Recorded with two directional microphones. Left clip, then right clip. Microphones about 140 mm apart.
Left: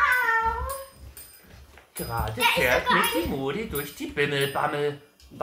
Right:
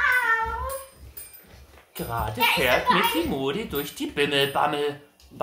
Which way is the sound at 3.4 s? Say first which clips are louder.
Right 2 dB; 35° right (ahead or behind).